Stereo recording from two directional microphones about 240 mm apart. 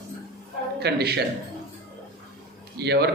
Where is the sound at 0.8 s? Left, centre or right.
Right.